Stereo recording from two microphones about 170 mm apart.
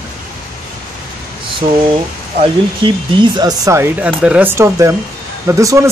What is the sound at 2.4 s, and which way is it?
Speech, 30° right (ahead or behind).